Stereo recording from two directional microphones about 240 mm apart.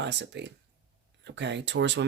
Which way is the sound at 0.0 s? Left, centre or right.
Right.